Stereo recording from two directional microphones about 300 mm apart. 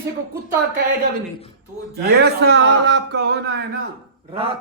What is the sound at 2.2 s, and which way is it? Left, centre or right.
Speech, right.